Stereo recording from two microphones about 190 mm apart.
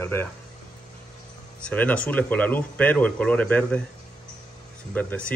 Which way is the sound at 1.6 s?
10° left (ahead or behind).